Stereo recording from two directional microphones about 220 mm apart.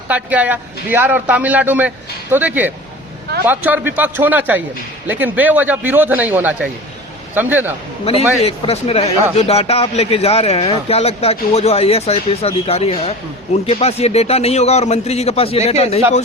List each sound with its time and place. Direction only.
0.1 s speech: 5° right (ahead or behind)
8.4 s speech: 30° left (ahead or behind)